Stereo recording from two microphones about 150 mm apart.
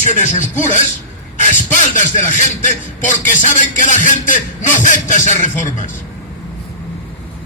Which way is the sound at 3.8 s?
55° left (ahead or behind).